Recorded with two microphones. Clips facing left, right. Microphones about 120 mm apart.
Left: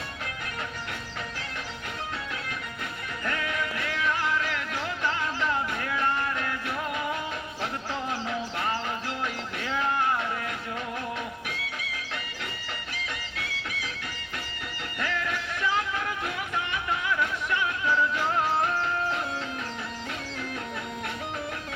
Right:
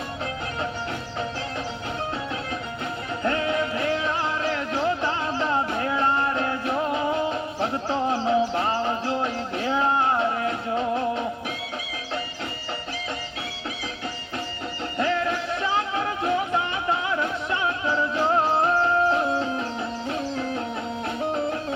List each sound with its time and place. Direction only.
3.2 s music: 30° right (ahead or behind)
14.9 s music: 30° right (ahead or behind)